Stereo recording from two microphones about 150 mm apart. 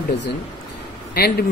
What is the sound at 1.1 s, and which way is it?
Speech, 85° left.